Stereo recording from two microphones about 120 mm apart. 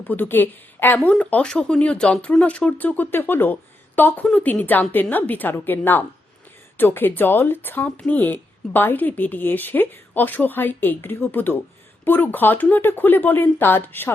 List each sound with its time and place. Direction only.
0.1 s speech: 15° left (ahead or behind)